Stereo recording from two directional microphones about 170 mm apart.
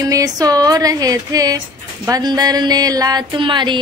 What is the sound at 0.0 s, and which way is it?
A woman's voice, 20° right (ahead or behind).